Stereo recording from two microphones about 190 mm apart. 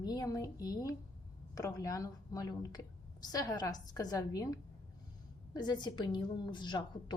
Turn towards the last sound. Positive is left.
turn(degrees=25)  # may be behind; listen again after turning